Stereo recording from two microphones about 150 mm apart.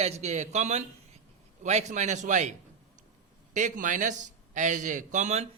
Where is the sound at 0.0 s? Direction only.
45° right (ahead or behind).